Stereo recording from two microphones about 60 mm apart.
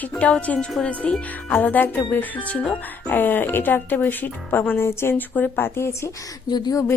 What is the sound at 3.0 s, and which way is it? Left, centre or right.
Speech, left.